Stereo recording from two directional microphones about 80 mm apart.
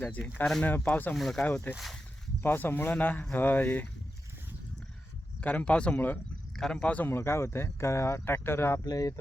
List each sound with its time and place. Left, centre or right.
0.6 s a man's voice: left
1.1 s speech: centre
1.4 s speech: centre
2.4 s a man's voice: left
5.4 s speech: centre
6.6 s speech: centre
6.8 s a man's voice: centre
7.1 s speech: left
8.8 s speech: left